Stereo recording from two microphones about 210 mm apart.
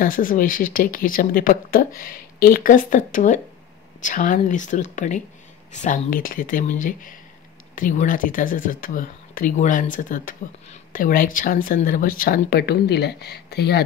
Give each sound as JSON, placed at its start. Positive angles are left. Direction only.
{"t": 0.0, "sound": "speech", "side_deg": 40}